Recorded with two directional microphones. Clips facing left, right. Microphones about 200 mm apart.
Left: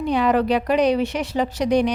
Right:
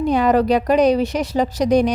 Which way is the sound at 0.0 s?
45° right (ahead or behind).